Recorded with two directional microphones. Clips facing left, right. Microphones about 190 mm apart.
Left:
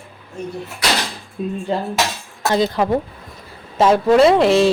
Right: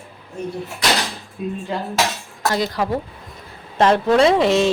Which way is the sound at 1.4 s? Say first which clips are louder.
Left 3 dB; 30° left (ahead or behind).